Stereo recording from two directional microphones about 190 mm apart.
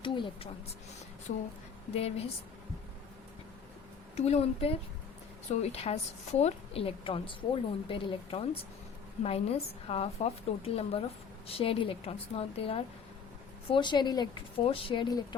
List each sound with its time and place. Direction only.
0.0 s a sound: 25° left (ahead or behind)
2.0 s a woman's voice: 30° left (ahead or behind)
4.2 s a woman's voice: 35° left (ahead or behind)